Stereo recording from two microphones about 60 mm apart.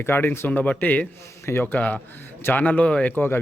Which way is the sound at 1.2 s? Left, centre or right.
Left.